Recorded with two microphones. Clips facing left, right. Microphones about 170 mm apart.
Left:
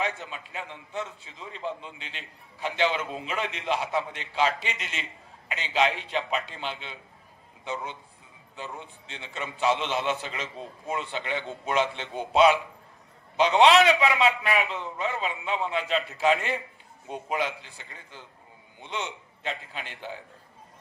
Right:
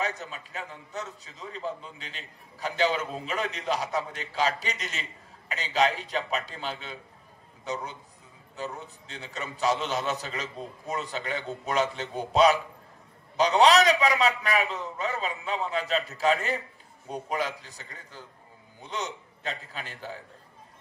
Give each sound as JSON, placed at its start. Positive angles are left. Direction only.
{"t": 0.0, "sound": "a man's voice", "side_deg": -40}
{"t": 13.4, "sound": "a man's voice", "side_deg": -40}